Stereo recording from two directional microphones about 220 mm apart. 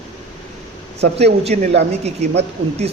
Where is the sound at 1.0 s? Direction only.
30° right (ahead or behind).